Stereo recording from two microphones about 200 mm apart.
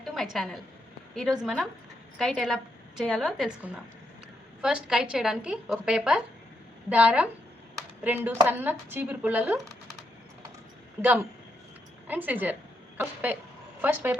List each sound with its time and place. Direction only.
0.0 s a woman's voice: centre (ahead or behind)
11.0 s a woman's voice: 10° right (ahead or behind)
13.8 s a woman's voice: 10° right (ahead or behind)